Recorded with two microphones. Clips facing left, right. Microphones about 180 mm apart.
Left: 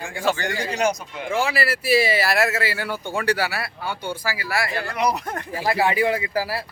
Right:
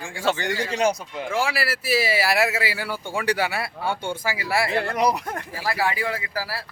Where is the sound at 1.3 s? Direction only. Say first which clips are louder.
Left 3 dB; 5° right (ahead or behind); by 4.8 s 25° right (ahead or behind).